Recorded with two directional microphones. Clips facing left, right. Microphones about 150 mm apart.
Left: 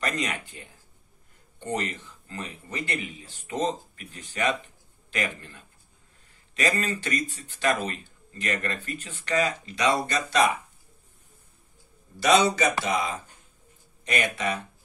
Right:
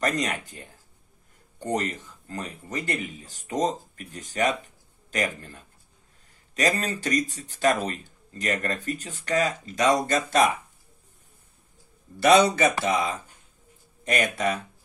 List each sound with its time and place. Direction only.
0.0 s speech: 40° right (ahead or behind)
12.2 s speech: 55° right (ahead or behind)